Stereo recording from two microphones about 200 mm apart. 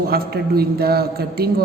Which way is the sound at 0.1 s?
50° right (ahead or behind).